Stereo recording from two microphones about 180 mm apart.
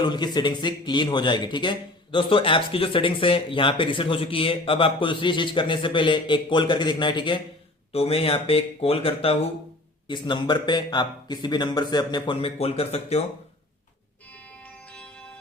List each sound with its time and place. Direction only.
0.0 s speech: 25° left (ahead or behind)